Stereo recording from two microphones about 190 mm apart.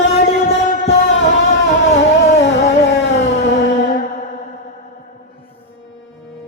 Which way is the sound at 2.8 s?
65° left (ahead or behind).